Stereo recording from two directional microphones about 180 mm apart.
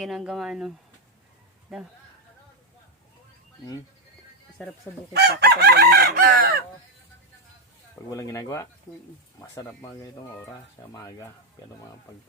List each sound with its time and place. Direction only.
0.0 s speech: centre (ahead or behind)
1.7 s speech: centre (ahead or behind)
5.1 s chicken: 65° right (ahead or behind)
8.1 s speech: 15° left (ahead or behind)